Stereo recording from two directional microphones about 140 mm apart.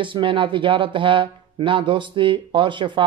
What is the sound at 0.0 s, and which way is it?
Speech, 35° right (ahead or behind).